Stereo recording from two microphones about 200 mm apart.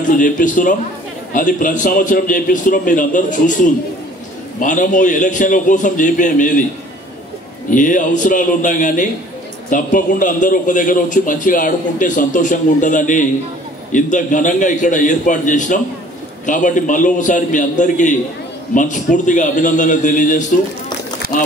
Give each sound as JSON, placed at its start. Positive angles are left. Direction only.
{"t": 0.0, "sound": "a man's voice", "side_deg": 40}
{"t": 7.7, "sound": "a man's voice", "side_deg": 40}